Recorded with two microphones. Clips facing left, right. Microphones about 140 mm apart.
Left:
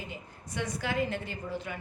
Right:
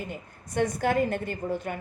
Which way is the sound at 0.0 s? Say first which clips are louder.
Right 5 dB; 50° right (ahead or behind).